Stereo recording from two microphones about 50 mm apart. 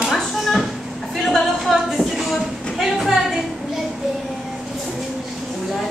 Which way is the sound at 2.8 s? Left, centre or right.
Centre.